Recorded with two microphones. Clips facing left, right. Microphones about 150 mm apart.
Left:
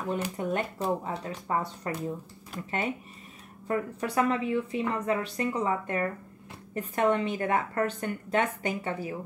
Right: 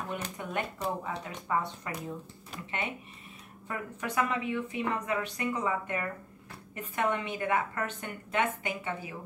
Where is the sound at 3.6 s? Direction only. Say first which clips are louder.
Left 7 dB; 35° left (ahead or behind).